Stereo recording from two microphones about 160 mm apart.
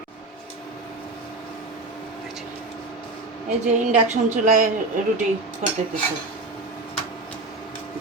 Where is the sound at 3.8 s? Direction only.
50° right (ahead or behind).